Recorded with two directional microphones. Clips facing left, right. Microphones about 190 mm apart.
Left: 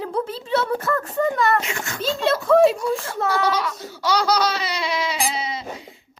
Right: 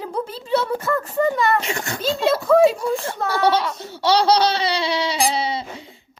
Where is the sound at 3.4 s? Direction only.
30° right (ahead or behind).